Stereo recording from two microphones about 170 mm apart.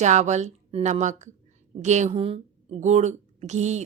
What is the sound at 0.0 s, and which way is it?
Speech, 45° right (ahead or behind).